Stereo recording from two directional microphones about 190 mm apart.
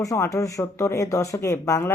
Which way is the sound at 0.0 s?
15° left (ahead or behind).